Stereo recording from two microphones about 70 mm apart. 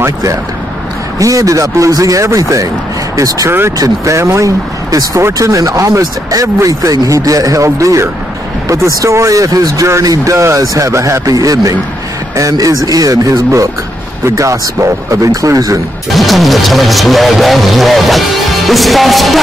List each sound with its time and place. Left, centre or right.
0.0 s speech: right
3.4 s speech: right
3.7 s speech: right
16.1 s speech: centre